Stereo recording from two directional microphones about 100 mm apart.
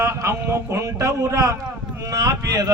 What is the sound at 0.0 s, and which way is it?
A man's voice, 25° right (ahead or behind).